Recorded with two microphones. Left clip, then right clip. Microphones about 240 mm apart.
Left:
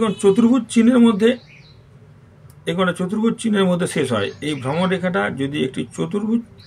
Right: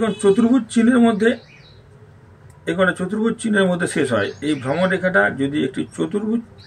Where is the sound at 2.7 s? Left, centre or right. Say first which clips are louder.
Right 2 dB; left.